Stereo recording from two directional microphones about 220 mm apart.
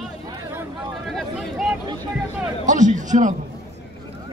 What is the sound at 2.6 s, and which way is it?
Speech, 35° right (ahead or behind).